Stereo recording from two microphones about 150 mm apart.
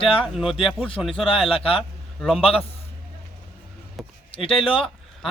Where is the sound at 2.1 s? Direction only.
Centre (ahead or behind).